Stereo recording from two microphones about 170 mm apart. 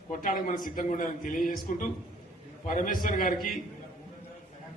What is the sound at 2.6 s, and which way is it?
Speech, 50° left (ahead or behind).